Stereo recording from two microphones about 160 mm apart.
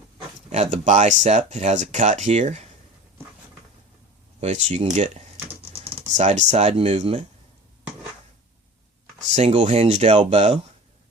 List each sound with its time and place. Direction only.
0.5 s speech: 45° right (ahead or behind)
4.4 s speech: 45° right (ahead or behind)
9.3 s speech: 45° right (ahead or behind)